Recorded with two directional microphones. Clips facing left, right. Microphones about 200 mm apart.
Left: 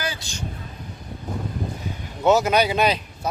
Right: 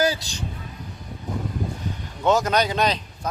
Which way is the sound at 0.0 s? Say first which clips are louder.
Right 9 dB; 40° right (ahead or behind).